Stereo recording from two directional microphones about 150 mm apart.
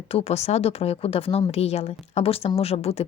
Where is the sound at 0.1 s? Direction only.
45° left (ahead or behind).